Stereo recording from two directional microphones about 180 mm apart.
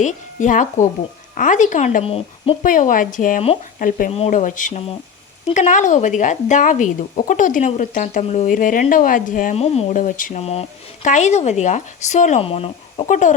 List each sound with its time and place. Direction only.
0.0 s speech: 45° left (ahead or behind)
2.6 s speech: 45° left (ahead or behind)
13.1 s speech: 45° left (ahead or behind)